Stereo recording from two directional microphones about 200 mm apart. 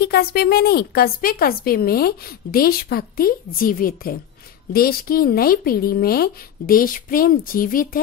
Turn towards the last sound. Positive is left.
turn(degrees=45)  # may be behind; listen again after turning